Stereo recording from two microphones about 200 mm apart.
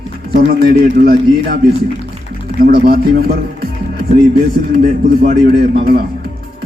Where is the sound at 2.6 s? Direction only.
50° right (ahead or behind).